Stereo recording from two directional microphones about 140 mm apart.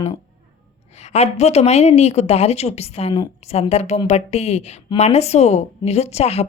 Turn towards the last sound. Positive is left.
turn(degrees=50)  # may be behind; listen again after turning